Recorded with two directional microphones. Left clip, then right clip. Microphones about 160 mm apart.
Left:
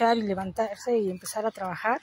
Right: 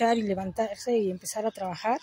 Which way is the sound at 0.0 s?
15° right (ahead or behind).